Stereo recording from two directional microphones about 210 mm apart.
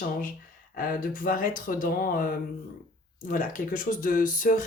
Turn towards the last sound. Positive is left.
turn(degrees=40)  # may be behind; listen again after turning